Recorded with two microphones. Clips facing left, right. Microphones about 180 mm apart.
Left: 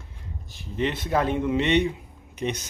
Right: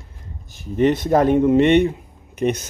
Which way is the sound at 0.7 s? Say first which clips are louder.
Right 9 dB; 45° right (ahead or behind).